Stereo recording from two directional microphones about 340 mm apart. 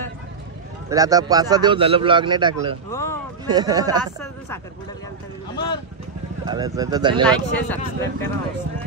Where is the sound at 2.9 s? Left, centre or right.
Centre.